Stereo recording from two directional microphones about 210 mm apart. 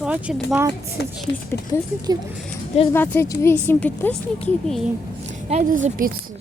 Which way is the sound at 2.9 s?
10° left (ahead or behind).